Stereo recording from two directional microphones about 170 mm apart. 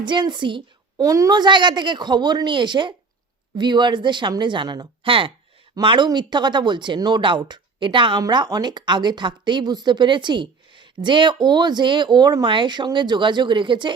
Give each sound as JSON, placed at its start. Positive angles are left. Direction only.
{"t": 0.0, "sound": "speech", "side_deg": -25}